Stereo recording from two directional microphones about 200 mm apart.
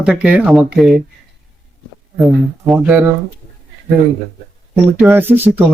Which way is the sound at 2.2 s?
Centre (ahead or behind).